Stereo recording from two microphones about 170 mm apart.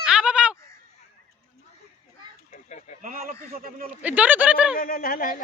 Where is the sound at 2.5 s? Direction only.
45° left (ahead or behind).